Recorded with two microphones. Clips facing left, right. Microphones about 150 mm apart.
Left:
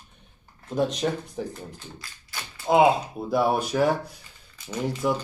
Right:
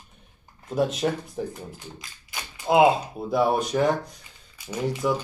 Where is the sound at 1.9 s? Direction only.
15° right (ahead or behind).